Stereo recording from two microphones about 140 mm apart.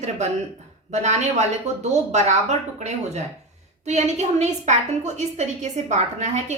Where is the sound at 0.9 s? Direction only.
55° right (ahead or behind).